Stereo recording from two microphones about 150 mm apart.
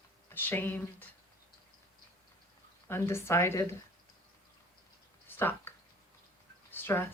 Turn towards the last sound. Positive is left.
turn(degrees=15)  # may be behind; listen again after turning